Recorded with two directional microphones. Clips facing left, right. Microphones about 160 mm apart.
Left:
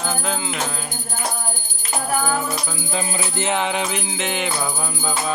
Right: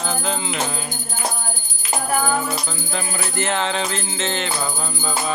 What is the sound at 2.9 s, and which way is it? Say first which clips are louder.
Music: left 2 dB; 15° left (ahead or behind).